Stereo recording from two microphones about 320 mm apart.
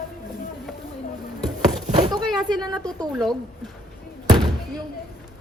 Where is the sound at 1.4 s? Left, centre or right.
Centre.